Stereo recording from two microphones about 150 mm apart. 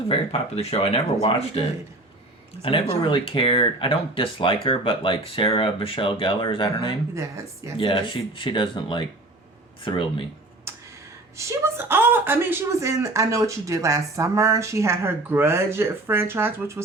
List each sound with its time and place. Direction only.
0.1 s speech: 40° left (ahead or behind)
7.1 s speech: 20° right (ahead or behind)
7.8 s speech: 30° left (ahead or behind)
11.3 s speech: 20° right (ahead or behind)